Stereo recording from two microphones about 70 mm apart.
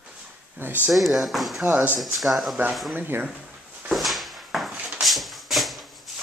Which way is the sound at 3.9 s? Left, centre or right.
Centre.